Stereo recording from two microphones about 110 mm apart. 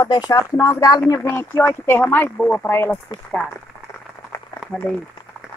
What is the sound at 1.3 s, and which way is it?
Speech, 15° left (ahead or behind).